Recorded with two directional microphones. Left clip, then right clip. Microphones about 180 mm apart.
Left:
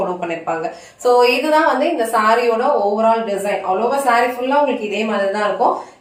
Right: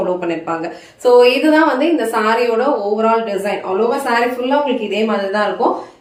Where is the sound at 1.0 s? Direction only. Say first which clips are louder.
Right 3 dB; 20° right (ahead or behind).